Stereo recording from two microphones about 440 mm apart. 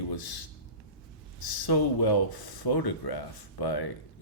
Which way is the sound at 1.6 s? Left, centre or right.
Left.